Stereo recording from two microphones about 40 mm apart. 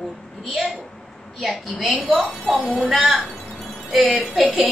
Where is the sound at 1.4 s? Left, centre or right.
Centre.